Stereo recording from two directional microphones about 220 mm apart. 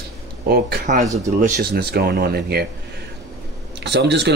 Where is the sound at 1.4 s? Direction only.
45° right (ahead or behind).